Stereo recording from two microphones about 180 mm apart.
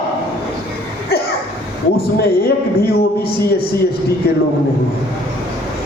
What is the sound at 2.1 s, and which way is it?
A man's voice, 55° left (ahead or behind).